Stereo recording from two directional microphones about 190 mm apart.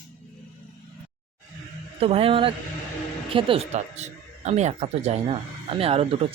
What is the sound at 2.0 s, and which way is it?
Speech, 30° right (ahead or behind).